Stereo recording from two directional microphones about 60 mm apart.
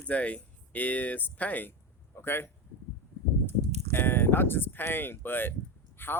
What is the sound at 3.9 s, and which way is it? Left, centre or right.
Speech, left.